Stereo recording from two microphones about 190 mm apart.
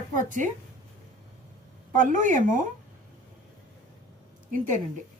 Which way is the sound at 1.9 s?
40° right (ahead or behind).